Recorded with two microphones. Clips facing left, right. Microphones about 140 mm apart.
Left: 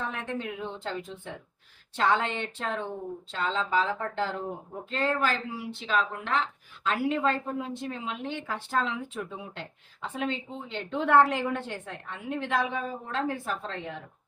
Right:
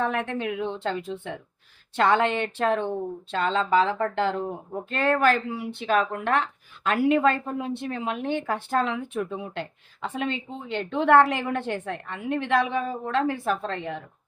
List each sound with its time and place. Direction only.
0.0 s a woman's voice: 65° right (ahead or behind)
2.0 s a woman's voice: 65° right (ahead or behind)
4.9 s a woman's voice: 60° right (ahead or behind)